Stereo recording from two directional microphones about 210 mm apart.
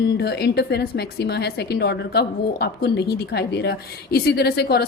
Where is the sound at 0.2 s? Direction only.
50° left (ahead or behind).